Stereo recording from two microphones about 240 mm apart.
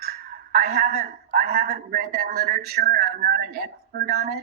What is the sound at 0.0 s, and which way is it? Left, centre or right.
A woman's voice, right.